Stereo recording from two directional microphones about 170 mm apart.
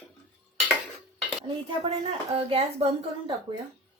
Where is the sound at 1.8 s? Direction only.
35° right (ahead or behind).